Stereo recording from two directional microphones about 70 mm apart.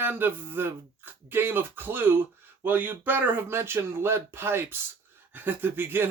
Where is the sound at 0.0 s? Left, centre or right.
Right.